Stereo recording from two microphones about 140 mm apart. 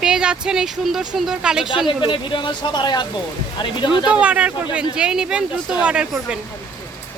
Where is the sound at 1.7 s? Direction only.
35° left (ahead or behind).